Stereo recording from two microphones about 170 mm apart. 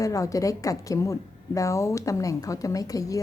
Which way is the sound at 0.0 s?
20° left (ahead or behind).